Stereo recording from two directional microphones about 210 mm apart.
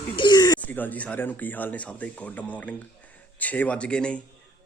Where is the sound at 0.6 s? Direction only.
10° left (ahead or behind).